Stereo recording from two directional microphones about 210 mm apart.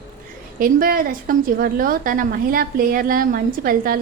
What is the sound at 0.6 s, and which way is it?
A woman's voice, 40° right (ahead or behind).